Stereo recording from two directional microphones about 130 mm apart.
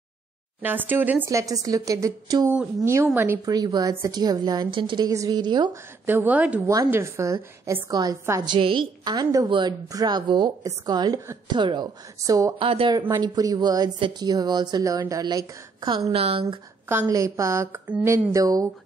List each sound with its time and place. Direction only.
0.6 s speech: 15° right (ahead or behind)
1.3 s a woman's voice: 25° right (ahead or behind)
3.5 s a woman's voice: 30° right (ahead or behind)
6.0 s a woman's voice: 15° right (ahead or behind); by 8.5 s 30° right (ahead or behind)
8.5 s a woman's voice: 40° right (ahead or behind); by 12.5 s 25° right (ahead or behind)
12.5 s speech: 45° right (ahead or behind)
13.1 s a woman's voice: 30° right (ahead or behind)
16.1 s speech: 50° right (ahead or behind)
17.0 s a woman's voice: 25° right (ahead or behind)